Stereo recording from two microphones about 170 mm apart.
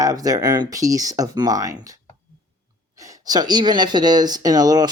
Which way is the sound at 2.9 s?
20° right (ahead or behind).